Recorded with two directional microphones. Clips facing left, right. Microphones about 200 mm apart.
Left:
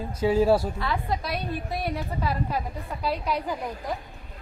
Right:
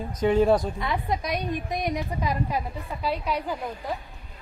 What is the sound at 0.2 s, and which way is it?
Speech, 5° left (ahead or behind).